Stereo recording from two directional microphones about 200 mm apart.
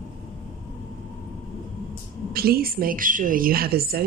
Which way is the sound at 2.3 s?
50° right (ahead or behind).